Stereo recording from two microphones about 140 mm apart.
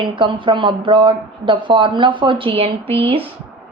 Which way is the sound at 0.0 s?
35° right (ahead or behind).